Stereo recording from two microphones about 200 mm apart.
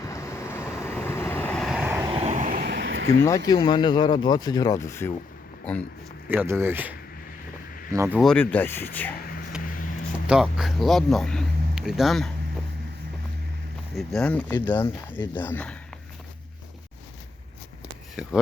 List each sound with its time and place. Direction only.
0.0 s vehicle: 15° left (ahead or behind); by 2.0 s 5° right (ahead or behind)
2.0 s vehicle: 30° right (ahead or behind); by 3.1 s 70° right (ahead or behind)
3.2 s speech: 15° left (ahead or behind)
6.2 s speech: 10° right (ahead or behind)
7.9 s speech: 10° right (ahead or behind)
8.2 s speech: 5° left (ahead or behind)
10.2 s speech: 5° right (ahead or behind)
13.9 s speech: 5° left (ahead or behind)